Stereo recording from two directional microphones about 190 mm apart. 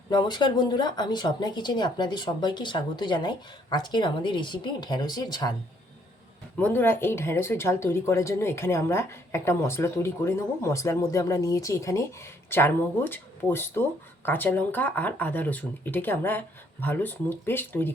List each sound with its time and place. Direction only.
0.1 s speech: 25° left (ahead or behind)
6.6 s speech: 10° left (ahead or behind)